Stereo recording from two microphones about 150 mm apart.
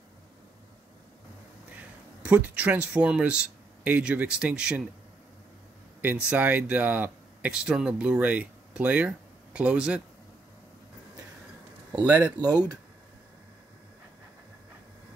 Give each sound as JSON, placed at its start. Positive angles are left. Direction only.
{"t": 2.2, "sound": "speech", "side_deg": -10}
{"t": 6.2, "sound": "speech", "side_deg": -10}
{"t": 11.9, "sound": "speech", "side_deg": -10}
{"t": 12.4, "sound": "speech", "side_deg": -25}